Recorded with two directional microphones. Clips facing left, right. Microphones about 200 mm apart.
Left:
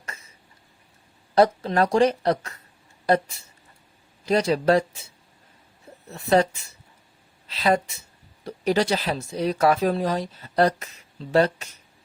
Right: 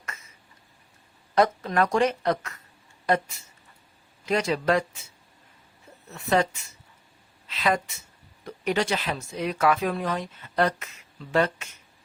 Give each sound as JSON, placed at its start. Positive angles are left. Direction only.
{"t": 0.0, "sound": "a sound", "side_deg": 30}
{"t": 1.4, "sound": "speech", "side_deg": 30}
{"t": 6.1, "sound": "a woman's voice", "side_deg": 35}